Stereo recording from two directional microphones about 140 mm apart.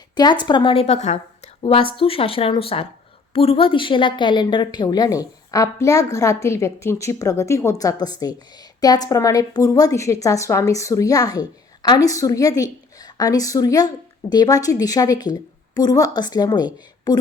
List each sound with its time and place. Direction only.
0.2 s speech: 30° left (ahead or behind); by 1.2 s 55° left (ahead or behind)
1.6 s a woman's voice: 40° left (ahead or behind)